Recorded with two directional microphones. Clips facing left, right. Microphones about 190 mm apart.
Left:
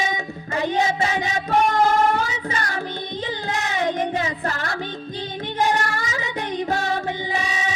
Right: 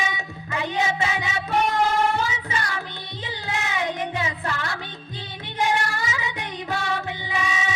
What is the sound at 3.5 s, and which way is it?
Child singing, 40° left (ahead or behind).